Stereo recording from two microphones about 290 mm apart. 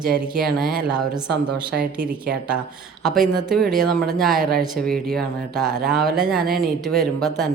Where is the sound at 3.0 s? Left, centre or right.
Centre.